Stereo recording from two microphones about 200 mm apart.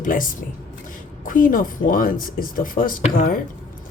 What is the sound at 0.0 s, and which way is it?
Speech, 45° left (ahead or behind).